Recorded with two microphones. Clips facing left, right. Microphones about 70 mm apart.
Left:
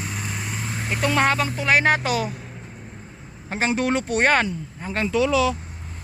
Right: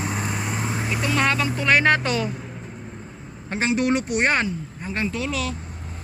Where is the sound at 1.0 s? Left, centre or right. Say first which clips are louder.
Left 4 dB; left.